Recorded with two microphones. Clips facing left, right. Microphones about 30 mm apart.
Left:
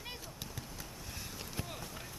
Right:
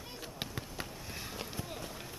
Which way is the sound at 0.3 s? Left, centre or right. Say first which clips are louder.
Right 5 dB; right.